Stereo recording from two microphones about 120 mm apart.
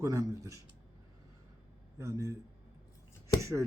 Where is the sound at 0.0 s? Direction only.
25° right (ahead or behind).